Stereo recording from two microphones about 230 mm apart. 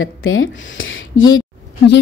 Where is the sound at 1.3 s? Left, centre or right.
Left.